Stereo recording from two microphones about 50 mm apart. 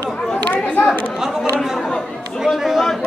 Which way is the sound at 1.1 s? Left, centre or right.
Centre.